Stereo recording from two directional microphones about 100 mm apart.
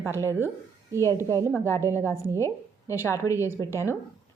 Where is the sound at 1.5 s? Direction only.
25° left (ahead or behind).